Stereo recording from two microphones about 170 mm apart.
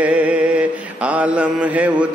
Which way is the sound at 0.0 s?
10° right (ahead or behind).